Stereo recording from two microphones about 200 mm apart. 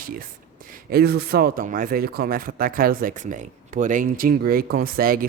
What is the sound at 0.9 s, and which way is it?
Speech, 50° right (ahead or behind).